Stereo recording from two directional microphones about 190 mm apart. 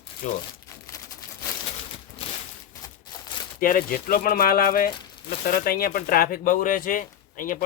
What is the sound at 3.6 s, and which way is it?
Speech, 45° left (ahead or behind).